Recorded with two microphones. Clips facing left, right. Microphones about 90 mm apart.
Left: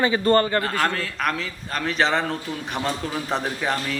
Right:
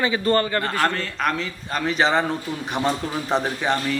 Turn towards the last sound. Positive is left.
turn(degrees=0)  # may be behind; listen again after turning